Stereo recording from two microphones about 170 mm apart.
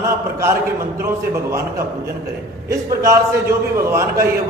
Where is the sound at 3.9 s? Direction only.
15° right (ahead or behind).